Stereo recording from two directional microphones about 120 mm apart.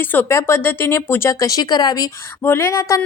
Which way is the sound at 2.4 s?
20° left (ahead or behind).